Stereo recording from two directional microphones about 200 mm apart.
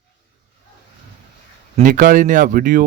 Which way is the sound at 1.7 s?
40° right (ahead or behind).